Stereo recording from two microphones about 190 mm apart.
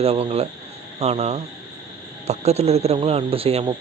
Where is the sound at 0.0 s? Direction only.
30° right (ahead or behind).